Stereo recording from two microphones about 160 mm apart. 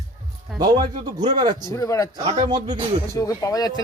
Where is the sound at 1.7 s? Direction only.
20° left (ahead or behind).